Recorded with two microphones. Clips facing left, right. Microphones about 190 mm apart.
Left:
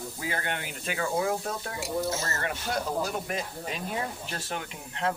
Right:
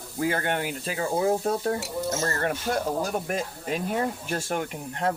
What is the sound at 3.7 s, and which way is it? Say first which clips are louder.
Speech: right 8 dB; 50° right (ahead or behind).